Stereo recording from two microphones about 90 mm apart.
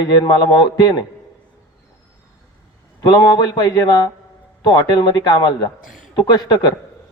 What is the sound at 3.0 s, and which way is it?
A man's voice, 50° left (ahead or behind).